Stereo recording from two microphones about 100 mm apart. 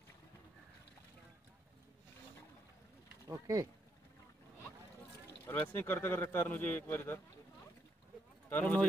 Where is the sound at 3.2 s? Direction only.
35° right (ahead or behind).